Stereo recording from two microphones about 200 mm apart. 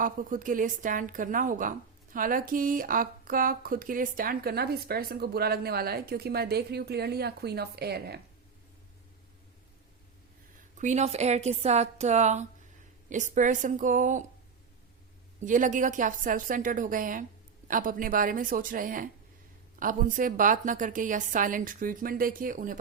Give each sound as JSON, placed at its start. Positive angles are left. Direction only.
{"t": 0.0, "sound": "a woman's voice", "side_deg": -45}
{"t": 10.8, "sound": "a woman's voice", "side_deg": -35}
{"t": 15.4, "sound": "a woman's voice", "side_deg": -40}